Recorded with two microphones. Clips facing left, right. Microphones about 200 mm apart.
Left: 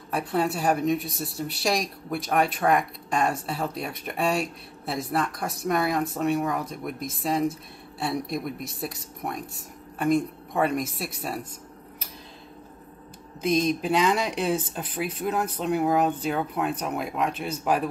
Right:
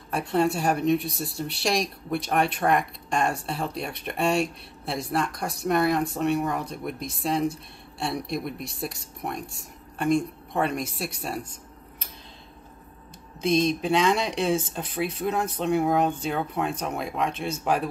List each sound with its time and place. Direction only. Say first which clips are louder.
0.1 s speech: right 2 dB; 5° left (ahead or behind)
13.4 s speech: right 1 dB; 5° left (ahead or behind)